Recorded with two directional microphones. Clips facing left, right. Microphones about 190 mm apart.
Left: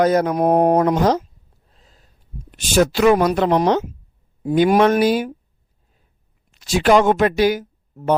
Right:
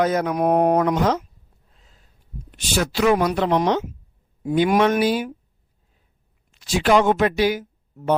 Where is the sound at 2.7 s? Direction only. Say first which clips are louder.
Left 5 dB; 50° left (ahead or behind).